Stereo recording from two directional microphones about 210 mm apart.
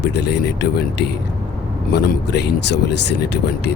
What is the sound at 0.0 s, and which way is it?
Speech, 55° left (ahead or behind).